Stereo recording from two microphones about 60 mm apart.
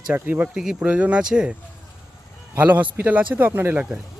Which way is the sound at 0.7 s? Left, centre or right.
Right.